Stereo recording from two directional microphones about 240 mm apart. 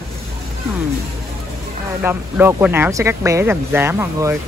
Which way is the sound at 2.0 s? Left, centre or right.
Centre.